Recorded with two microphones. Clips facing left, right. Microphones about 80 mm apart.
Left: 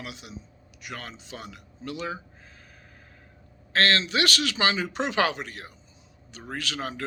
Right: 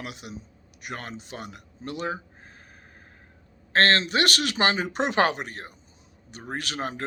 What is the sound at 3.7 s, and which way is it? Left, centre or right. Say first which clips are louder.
Speech: right 2 dB; right.